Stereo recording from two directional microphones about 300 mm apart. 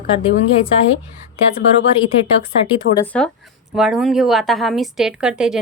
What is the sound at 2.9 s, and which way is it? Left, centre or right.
Speech, left.